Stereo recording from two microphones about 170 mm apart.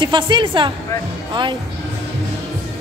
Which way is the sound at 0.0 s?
25° right (ahead or behind).